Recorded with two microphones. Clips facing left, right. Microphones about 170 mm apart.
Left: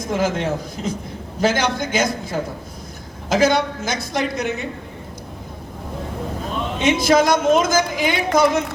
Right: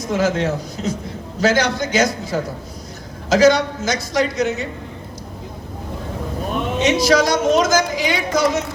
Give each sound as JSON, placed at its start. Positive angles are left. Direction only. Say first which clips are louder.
{"t": 0.0, "sound": "a woman's voice", "louder": "right 2 dB", "side_deg": 50}
{"t": 6.8, "sound": "speech", "louder": "even", "side_deg": 55}